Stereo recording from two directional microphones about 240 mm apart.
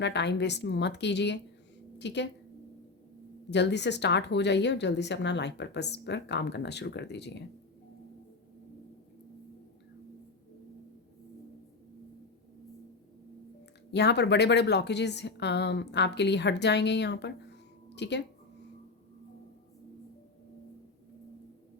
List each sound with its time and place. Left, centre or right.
0.0 s a woman's voice: left
3.5 s a woman's voice: left
13.9 s a woman's voice: left